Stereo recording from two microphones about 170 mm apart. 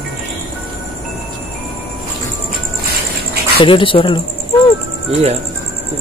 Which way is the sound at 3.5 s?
30° left (ahead or behind).